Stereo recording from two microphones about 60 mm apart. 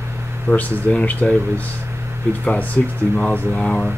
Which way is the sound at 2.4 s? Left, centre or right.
Left.